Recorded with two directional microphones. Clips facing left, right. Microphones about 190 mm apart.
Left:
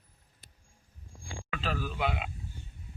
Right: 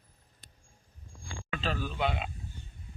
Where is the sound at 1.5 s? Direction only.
10° left (ahead or behind).